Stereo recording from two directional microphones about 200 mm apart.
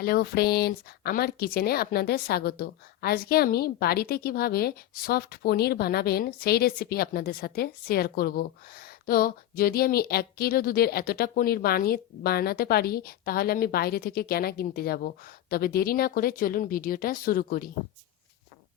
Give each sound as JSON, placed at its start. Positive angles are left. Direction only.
{"t": 0.0, "sound": "speech", "side_deg": 50}